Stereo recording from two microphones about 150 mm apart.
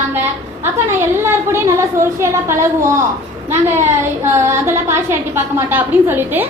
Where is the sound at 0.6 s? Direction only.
15° right (ahead or behind).